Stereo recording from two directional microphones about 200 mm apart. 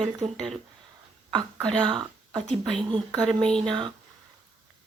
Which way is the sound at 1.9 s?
25° right (ahead or behind).